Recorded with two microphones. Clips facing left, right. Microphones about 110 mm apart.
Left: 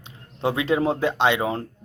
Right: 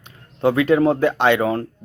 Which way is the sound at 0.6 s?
25° left (ahead or behind).